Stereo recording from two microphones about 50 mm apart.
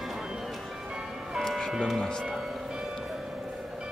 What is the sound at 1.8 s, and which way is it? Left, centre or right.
Speech, centre.